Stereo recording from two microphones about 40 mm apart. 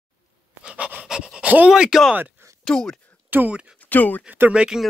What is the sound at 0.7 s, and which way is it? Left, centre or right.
Pant, right.